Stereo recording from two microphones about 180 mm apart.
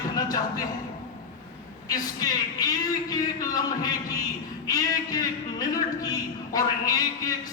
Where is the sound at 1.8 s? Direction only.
20° left (ahead or behind).